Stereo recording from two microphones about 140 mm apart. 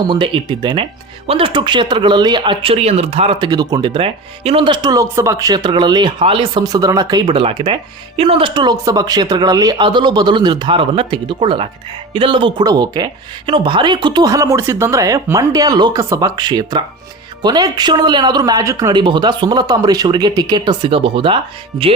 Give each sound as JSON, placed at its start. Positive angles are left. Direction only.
{"t": 0.0, "sound": "speech", "side_deg": -35}
{"t": 3.3, "sound": "speech", "side_deg": -30}